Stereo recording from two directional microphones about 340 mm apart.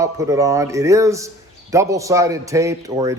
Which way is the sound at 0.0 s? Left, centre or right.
Centre.